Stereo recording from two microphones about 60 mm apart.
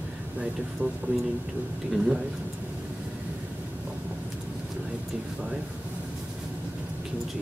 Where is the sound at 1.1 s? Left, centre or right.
Right.